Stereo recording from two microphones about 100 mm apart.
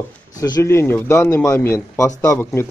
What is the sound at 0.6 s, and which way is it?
Speech, 25° left (ahead or behind).